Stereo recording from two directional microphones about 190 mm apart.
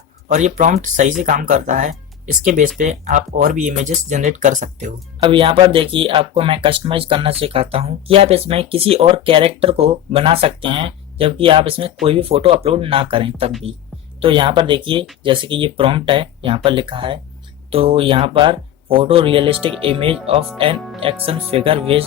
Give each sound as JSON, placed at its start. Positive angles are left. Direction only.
{"t": 0.3, "sound": "speech", "side_deg": -40}
{"t": 5.2, "sound": "speech", "side_deg": -25}